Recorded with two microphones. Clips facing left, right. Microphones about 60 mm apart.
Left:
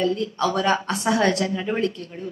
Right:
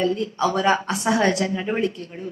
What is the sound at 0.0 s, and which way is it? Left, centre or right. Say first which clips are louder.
A woman's voice: right 1 dB; centre.